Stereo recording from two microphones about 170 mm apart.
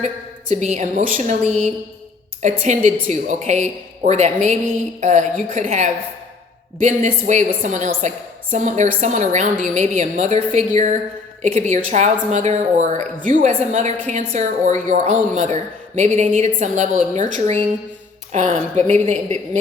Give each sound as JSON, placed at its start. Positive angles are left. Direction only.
{"t": 0.5, "sound": "a woman's voice", "side_deg": -45}